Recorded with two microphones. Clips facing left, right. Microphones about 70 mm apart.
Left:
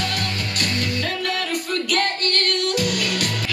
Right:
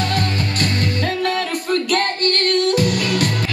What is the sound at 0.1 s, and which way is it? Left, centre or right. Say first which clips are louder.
Music: right 5 dB; right.